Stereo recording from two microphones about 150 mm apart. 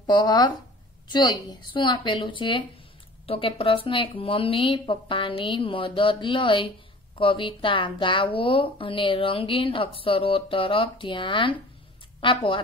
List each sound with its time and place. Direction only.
0.0 s a woman's voice: 30° left (ahead or behind)